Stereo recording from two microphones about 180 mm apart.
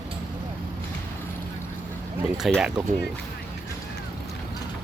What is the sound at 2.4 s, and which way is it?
Speech, 5° right (ahead or behind).